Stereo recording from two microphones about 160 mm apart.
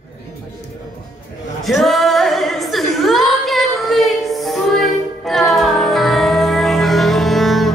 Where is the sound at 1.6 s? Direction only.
Centre (ahead or behind).